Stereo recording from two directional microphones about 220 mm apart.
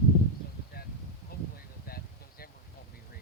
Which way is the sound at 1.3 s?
45° left (ahead or behind).